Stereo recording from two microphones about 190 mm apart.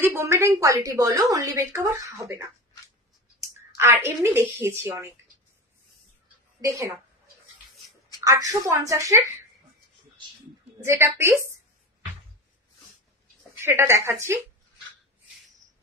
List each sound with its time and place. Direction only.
0.0 s a woman's voice: 10° right (ahead or behind)
3.7 s a woman's voice: 15° right (ahead or behind)
6.6 s a woman's voice: 15° right (ahead or behind)
8.2 s a woman's voice: 15° right (ahead or behind)
10.8 s a woman's voice: 15° right (ahead or behind)
13.7 s a woman's voice: 15° right (ahead or behind)